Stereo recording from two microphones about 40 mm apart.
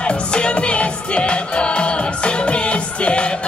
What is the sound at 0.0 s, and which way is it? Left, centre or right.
Music, left.